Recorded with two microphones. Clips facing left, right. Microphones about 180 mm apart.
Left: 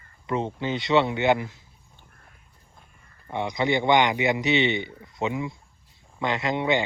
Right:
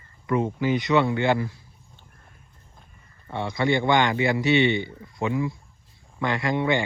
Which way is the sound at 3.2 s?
15° left (ahead or behind).